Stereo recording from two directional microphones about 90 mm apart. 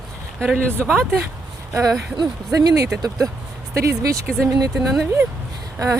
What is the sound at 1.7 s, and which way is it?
Speech, 35° right (ahead or behind).